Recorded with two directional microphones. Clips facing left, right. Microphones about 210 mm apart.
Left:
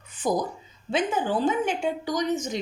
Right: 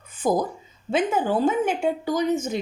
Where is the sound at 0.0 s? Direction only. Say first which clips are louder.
Right 3 dB; 50° right (ahead or behind).